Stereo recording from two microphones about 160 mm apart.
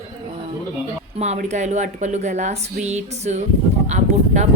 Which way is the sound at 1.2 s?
45° right (ahead or behind).